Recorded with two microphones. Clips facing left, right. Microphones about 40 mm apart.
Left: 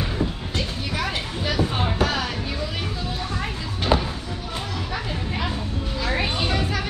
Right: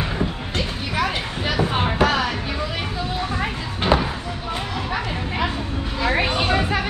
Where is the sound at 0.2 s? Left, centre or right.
Centre.